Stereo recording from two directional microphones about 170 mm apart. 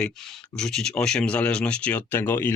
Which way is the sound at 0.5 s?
5° left (ahead or behind).